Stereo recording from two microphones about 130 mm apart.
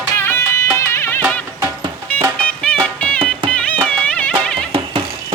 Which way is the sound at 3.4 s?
10° left (ahead or behind).